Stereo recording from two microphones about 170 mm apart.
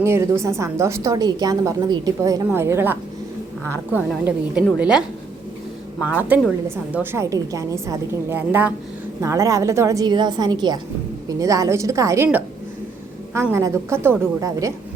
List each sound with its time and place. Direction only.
0.0 s a woman's voice: 15° right (ahead or behind)
4.2 s a woman's voice: 5° right (ahead or behind)